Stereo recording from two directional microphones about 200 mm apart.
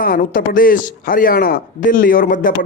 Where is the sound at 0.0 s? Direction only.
45° left (ahead or behind).